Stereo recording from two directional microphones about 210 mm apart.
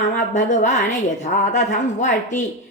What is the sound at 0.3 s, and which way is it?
Speech, 35° left (ahead or behind).